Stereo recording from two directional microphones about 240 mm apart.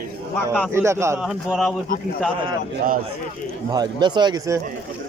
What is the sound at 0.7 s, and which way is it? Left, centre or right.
Speech, centre.